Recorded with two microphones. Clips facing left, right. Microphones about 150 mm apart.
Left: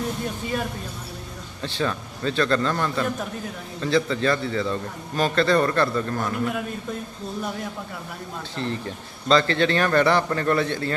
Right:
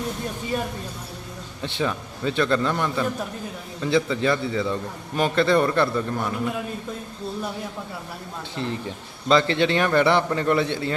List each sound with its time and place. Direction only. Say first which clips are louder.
1.6 s a man's voice: even; 15° right (ahead or behind)
8.6 s a man's voice: even; 15° right (ahead or behind)